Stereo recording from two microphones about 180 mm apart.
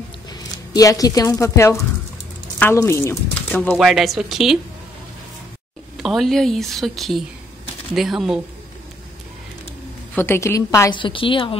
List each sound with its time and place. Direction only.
0.3 s speech: 20° left (ahead or behind)
3.7 s a woman's voice: centre (ahead or behind)
6.0 s a woman's voice: centre (ahead or behind)
10.1 s a woman's voice: 15° left (ahead or behind)
11.0 s a woman's voice: 30° left (ahead or behind)